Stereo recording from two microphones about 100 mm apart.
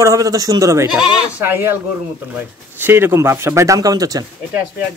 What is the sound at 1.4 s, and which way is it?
Speech, 25° right (ahead or behind).